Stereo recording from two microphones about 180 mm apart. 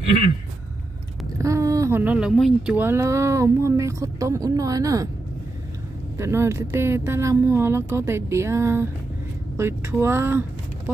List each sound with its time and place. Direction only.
1.4 s speech: 15° right (ahead or behind)
6.1 s speech: 15° right (ahead or behind)